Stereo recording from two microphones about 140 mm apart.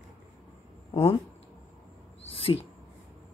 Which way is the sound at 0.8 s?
40° left (ahead or behind).